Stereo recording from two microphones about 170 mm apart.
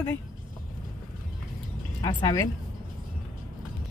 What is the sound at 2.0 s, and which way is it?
Speech, 20° left (ahead or behind).